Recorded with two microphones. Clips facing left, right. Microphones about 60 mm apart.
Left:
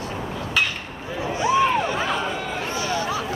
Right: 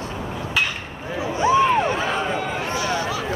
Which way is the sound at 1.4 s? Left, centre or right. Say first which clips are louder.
Right 2 dB; right.